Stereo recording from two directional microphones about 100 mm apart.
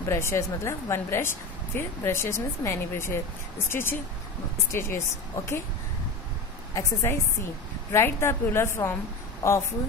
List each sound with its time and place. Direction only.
0.0 s speech: 30° left (ahead or behind)
6.7 s speech: 30° left (ahead or behind)